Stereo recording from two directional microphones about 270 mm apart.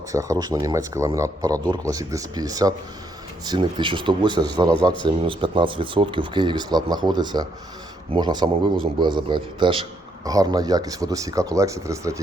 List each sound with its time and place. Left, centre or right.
0.1 s a man's voice: centre